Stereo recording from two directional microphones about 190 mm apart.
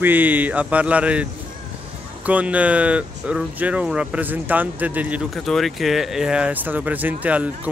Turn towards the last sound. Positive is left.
turn(degrees=-10)  # may be behind; listen again after turning